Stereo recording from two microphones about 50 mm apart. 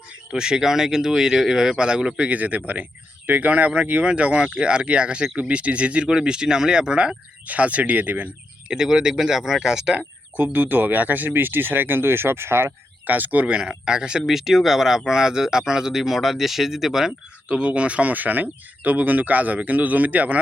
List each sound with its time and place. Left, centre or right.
0.3 s speech: centre
7.4 s speech: right
8.7 s speech: centre
10.3 s speech: right
13.1 s speech: right
13.5 s speech: centre
14.3 s speech: centre
17.5 s speech: right